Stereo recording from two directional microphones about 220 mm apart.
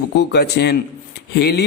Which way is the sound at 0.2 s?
50° left (ahead or behind).